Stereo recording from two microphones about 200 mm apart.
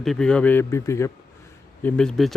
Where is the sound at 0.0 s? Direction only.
Centre (ahead or behind).